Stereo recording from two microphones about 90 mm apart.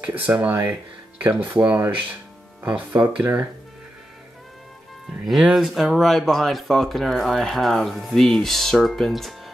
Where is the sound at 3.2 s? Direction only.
20° right (ahead or behind).